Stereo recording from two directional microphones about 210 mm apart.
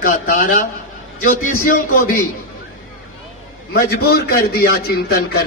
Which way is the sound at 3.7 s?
45° left (ahead or behind).